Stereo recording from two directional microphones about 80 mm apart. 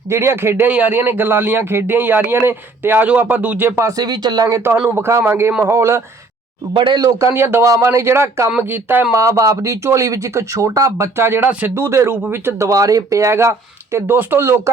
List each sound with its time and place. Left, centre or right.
0.1 s a man's voice: right
3.8 s speech: right
4.9 s speech: right
6.7 s speech: right
7.0 s a man's voice: right
7.3 s a man's voice: right
9.1 s speech: right
11.7 s speech: right